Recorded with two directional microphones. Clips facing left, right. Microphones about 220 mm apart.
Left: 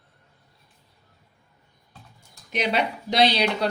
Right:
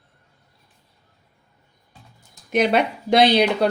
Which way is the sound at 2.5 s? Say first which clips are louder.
Right 6 dB; 50° right (ahead or behind).